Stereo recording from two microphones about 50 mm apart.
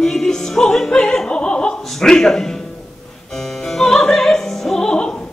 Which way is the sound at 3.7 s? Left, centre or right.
Centre.